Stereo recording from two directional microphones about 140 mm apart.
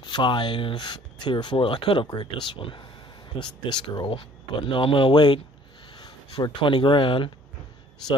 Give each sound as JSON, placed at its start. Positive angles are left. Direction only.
{"t": 0.0, "sound": "speech", "side_deg": 35}